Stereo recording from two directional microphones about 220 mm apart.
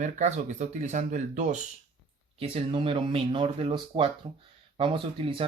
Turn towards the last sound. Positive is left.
turn(degrees=-25)  # may be behind; listen again after turning